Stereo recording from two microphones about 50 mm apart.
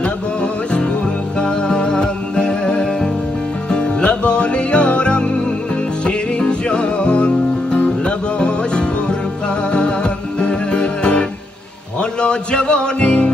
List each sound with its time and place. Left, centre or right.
0.0 s music: centre